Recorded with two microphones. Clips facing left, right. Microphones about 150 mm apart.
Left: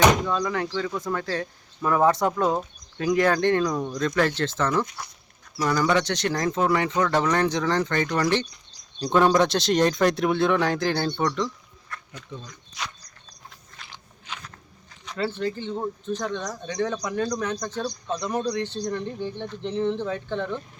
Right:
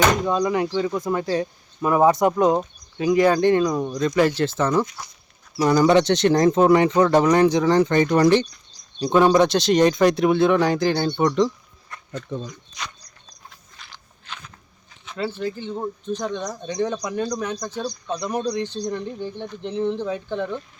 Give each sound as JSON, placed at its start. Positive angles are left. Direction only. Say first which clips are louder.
{"t": 0.3, "sound": "speech", "louder": "right 5 dB", "side_deg": -20}
{"t": 5.5, "sound": "speech", "louder": "right 6 dB", "side_deg": -25}
{"t": 9.0, "sound": "speech", "louder": "right 3 dB", "side_deg": -5}
{"t": 11.3, "sound": "a sound", "louder": "right 7 dB", "side_deg": -20}
{"t": 12.8, "sound": "a sound", "louder": "left 1 dB", "side_deg": 5}
{"t": 15.2, "sound": "speech", "louder": "even", "side_deg": -10}